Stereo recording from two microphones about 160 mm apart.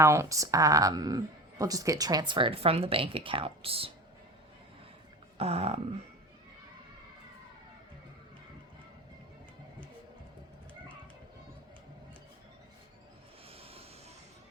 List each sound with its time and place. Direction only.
0.0 s speech: 15° right (ahead or behind); by 3.9 s 35° right (ahead or behind)
5.4 s a sound: 40° right (ahead or behind)
13.5 s vehicle: 40° right (ahead or behind)